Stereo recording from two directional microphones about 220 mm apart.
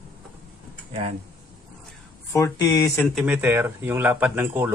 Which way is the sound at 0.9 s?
25° right (ahead or behind).